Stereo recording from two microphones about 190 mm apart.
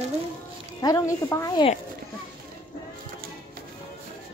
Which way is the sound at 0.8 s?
15° left (ahead or behind).